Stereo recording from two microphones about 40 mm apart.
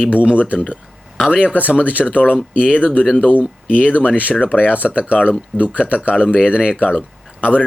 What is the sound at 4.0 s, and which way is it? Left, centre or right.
Speech, left.